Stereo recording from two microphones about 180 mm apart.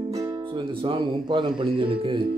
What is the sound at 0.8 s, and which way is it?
Speech, 25° right (ahead or behind).